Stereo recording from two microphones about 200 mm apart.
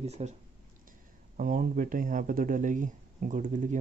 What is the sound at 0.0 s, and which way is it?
Speech, 35° right (ahead or behind).